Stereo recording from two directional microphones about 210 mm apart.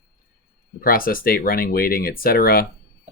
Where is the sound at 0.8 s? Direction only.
45° left (ahead or behind).